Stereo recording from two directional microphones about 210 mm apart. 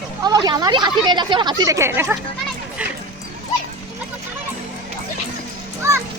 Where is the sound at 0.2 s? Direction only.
20° right (ahead or behind).